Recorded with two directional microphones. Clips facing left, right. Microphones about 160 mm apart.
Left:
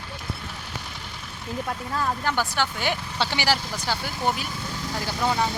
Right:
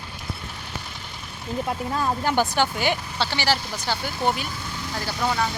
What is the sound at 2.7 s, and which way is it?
Speech, centre (ahead or behind).